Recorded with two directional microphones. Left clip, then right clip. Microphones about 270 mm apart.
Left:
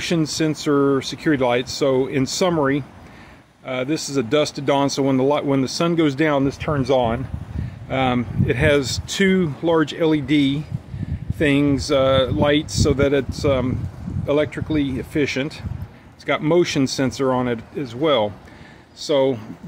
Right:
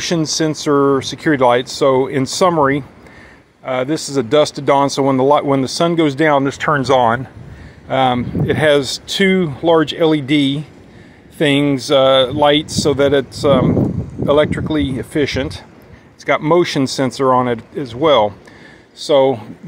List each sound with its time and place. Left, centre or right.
0.0 s speech: centre
7.9 s speech: centre